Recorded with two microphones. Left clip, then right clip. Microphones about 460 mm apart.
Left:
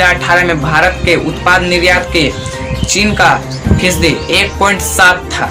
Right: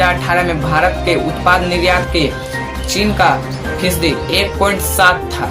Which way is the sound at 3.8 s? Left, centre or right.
Right.